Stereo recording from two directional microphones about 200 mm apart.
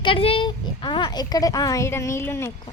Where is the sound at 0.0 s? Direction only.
25° left (ahead or behind).